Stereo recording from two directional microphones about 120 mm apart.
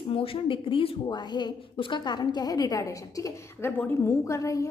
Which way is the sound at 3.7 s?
15° left (ahead or behind).